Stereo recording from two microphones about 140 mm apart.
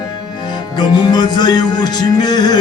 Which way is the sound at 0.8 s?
30° left (ahead or behind).